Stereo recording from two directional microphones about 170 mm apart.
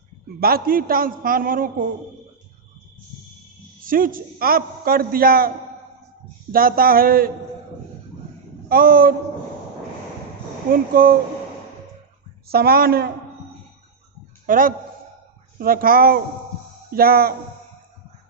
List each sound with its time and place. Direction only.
0.3 s a man's voice: 60° right (ahead or behind)
3.8 s a man's voice: 55° right (ahead or behind)
6.5 s a man's voice: 60° right (ahead or behind)
8.7 s a man's voice: 60° right (ahead or behind)
10.7 s a man's voice: 60° right (ahead or behind)
12.5 s a man's voice: 65° right (ahead or behind)
14.4 s a man's voice: 55° right (ahead or behind)